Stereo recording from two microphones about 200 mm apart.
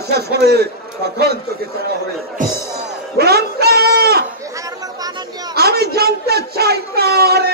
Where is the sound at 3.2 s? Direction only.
50° right (ahead or behind).